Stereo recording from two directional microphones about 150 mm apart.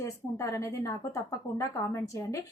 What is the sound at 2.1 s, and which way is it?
Speech, 20° left (ahead or behind).